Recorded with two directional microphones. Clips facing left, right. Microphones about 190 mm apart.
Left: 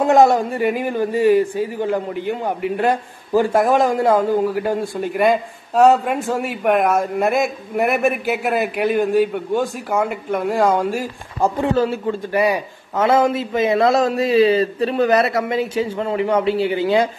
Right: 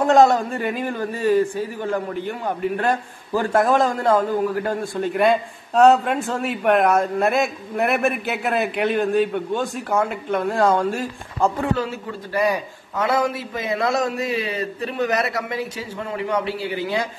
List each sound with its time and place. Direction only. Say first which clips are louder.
0.0 s a man's voice: left 2 dB; 15° left (ahead or behind)
13.0 s a man's voice: left 5 dB; 25° left (ahead or behind)